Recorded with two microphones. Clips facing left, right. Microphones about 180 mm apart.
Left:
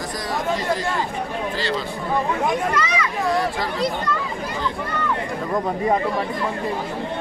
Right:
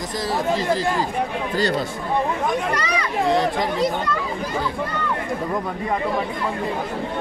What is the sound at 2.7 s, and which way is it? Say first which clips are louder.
Speech: left 1 dB; 35° right (ahead or behind).